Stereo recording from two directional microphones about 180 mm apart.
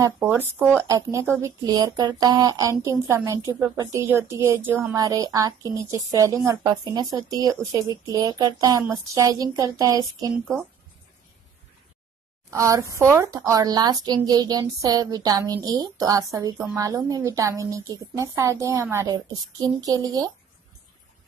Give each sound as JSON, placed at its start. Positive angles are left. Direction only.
{"t": 0.0, "sound": "speech", "side_deg": -10}
{"t": 12.4, "sound": "speech", "side_deg": -15}